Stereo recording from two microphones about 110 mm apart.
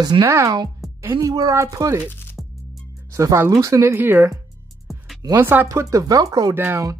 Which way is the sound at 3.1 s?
25° right (ahead or behind).